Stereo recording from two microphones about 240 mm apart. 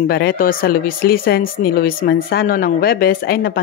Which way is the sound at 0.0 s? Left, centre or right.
Left.